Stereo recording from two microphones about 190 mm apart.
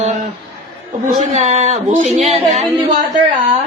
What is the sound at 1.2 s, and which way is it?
Music, 40° right (ahead or behind).